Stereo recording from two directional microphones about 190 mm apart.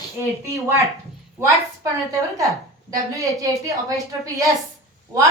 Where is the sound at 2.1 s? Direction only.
15° right (ahead or behind).